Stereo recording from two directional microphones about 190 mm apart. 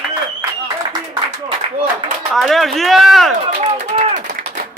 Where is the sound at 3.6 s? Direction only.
35° right (ahead or behind).